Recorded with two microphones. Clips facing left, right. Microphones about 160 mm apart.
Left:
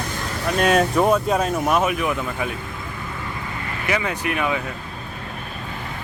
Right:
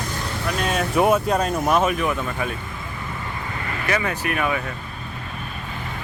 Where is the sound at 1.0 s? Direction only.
5° right (ahead or behind); by 2.5 s 10° left (ahead or behind).